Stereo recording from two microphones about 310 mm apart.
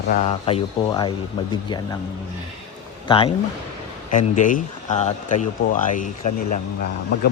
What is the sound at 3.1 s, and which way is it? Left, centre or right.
A man's voice, centre.